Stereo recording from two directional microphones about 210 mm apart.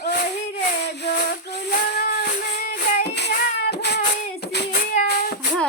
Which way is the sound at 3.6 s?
50° left (ahead or behind).